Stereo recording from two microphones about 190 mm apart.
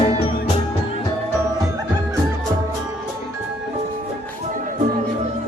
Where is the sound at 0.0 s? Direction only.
30° left (ahead or behind).